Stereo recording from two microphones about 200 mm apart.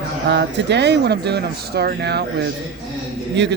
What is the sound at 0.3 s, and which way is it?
Speech, 60° right (ahead or behind).